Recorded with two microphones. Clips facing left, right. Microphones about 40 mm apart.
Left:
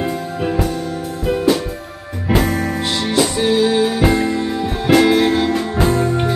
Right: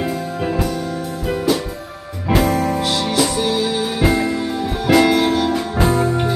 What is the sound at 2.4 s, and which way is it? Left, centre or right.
Music, left.